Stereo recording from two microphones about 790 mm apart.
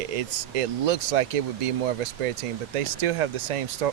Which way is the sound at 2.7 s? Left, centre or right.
Right.